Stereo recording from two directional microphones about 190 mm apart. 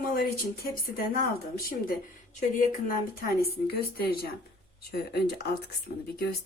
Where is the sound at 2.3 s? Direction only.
45° left (ahead or behind).